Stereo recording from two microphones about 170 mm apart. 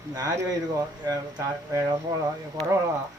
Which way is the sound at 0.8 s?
20° right (ahead or behind).